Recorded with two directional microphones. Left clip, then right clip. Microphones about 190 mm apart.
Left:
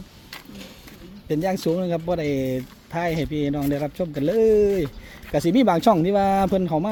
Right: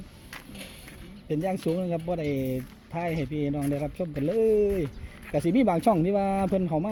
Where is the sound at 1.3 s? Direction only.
30° left (ahead or behind).